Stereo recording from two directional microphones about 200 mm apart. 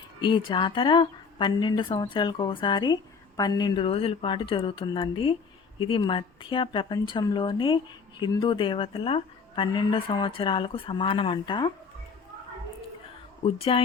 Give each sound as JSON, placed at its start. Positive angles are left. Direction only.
{"t": 0.2, "sound": "a woman's voice", "side_deg": 25}
{"t": 13.4, "sound": "a woman's voice", "side_deg": 30}